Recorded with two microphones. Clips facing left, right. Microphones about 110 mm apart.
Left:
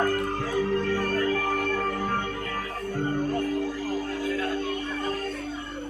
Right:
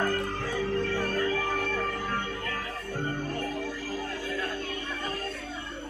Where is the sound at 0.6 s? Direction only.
45° left (ahead or behind).